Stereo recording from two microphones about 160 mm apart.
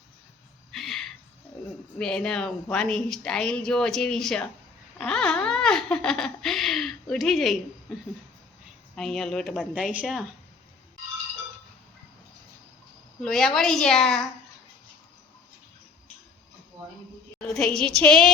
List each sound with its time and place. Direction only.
0.7 s cricket: centre (ahead or behind)
2.0 s speech: 5° left (ahead or behind)
4.9 s laughter: 5° left (ahead or behind)
9.0 s speech: 5° left (ahead or behind)
9.7 s speech: 5° right (ahead or behind)
13.2 s speech: centre (ahead or behind)
17.4 s speech: 5° left (ahead or behind)